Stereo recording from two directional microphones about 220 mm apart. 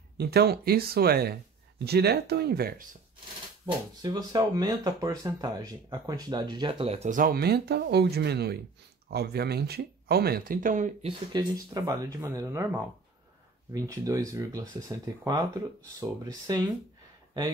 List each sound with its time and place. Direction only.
0.2 s speech: 45° right (ahead or behind)
4.0 s speech: 15° right (ahead or behind)
11.3 s speech: 15° right (ahead or behind)